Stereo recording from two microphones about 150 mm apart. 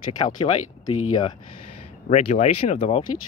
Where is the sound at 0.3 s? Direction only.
50° left (ahead or behind).